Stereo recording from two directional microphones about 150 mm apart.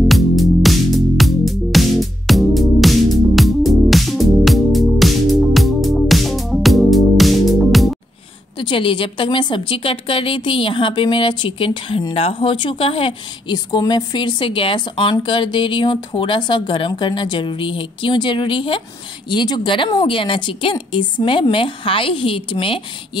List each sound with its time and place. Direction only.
0.1 s music: centre (ahead or behind)
8.5 s a woman's voice: 35° left (ahead or behind)